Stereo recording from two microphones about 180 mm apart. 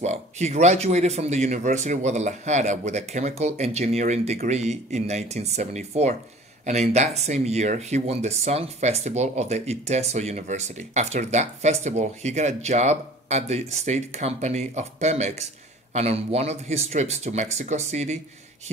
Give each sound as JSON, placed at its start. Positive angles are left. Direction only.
{"t": 0.0, "sound": "speech", "side_deg": -40}